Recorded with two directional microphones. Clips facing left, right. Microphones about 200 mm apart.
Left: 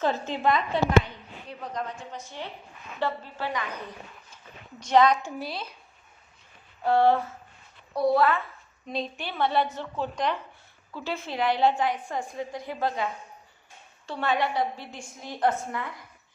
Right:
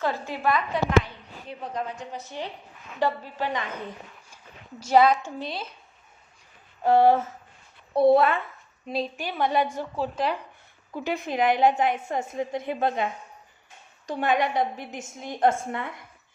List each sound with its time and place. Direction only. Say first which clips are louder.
0.0 s a woman's voice: left 1 dB; 20° left (ahead or behind)
2.0 s a woman's voice: right 3 dB; 40° right (ahead or behind)
3.0 s a woman's voice: right 4 dB; 15° right (ahead or behind)
4.8 s a woman's voice: right 1 dB; 5° right (ahead or behind)
5.2 s a woman's voice: right 1 dB; 5° left (ahead or behind)
6.8 s a woman's voice: right 3 dB; 20° right (ahead or behind)
8.9 s a woman's voice: right 3 dB; 5° right (ahead or behind)
10.9 s a woman's voice: right 4 dB; 15° right (ahead or behind)
14.1 s a woman's voice: right 3 dB; 15° right (ahead or behind)